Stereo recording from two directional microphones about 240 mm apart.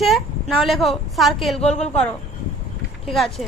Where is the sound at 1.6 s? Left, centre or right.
Left.